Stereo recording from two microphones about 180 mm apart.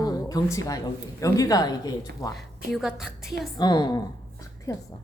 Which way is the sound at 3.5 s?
25° left (ahead or behind).